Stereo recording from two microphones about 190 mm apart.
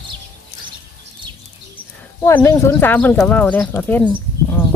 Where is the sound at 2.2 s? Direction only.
15° left (ahead or behind).